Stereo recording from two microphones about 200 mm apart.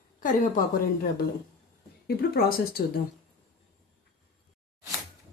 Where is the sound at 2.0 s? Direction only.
50° left (ahead or behind).